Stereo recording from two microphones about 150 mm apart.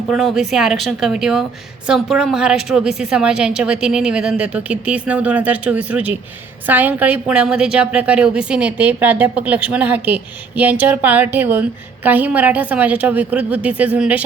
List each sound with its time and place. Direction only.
0.1 s a woman's voice: centre (ahead or behind)